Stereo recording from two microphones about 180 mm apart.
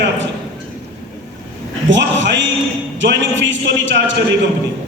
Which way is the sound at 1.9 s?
90° right.